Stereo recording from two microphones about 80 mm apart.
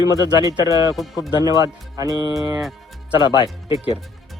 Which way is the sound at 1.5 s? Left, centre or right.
Right.